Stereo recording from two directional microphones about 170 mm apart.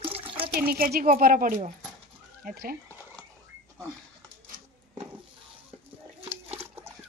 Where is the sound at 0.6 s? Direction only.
60° right (ahead or behind).